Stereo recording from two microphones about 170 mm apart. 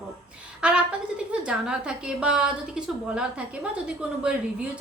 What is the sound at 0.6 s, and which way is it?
A woman's voice, 5° right (ahead or behind).